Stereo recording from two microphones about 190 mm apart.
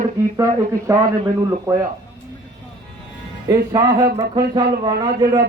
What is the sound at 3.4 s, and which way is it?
Speech, 20° right (ahead or behind).